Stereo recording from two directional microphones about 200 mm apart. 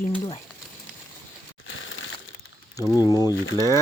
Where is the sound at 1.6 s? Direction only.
85° left.